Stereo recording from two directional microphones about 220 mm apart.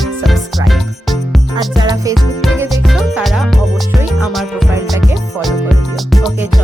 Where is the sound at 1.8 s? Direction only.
20° right (ahead or behind).